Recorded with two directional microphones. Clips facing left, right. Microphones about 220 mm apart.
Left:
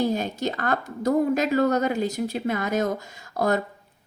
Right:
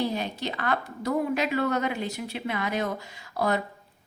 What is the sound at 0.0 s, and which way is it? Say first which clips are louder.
A woman's voice: left 4 dB; 45° left (ahead or behind).